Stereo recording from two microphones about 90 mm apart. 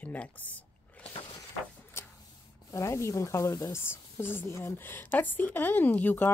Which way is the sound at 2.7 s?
35° left (ahead or behind).